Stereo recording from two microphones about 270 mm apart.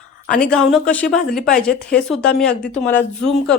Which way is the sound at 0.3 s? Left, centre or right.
Centre.